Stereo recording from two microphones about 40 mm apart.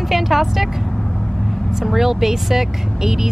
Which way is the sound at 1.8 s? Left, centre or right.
Centre.